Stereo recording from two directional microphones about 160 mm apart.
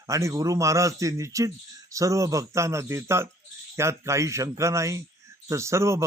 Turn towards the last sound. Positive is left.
turn(degrees=-15)  # may be behind; listen again after turning